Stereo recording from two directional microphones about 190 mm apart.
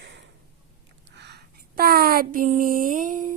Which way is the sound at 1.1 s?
65° right (ahead or behind).